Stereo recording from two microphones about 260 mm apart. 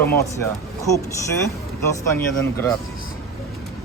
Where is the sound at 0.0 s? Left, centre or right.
Centre.